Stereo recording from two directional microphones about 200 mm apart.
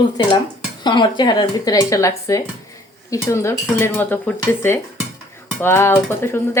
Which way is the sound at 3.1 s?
15° left (ahead or behind).